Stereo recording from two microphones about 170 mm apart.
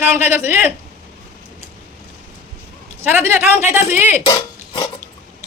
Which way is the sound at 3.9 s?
40° left (ahead or behind).